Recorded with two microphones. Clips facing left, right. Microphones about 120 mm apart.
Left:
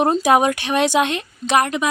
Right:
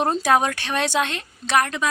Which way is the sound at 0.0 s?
15° left (ahead or behind).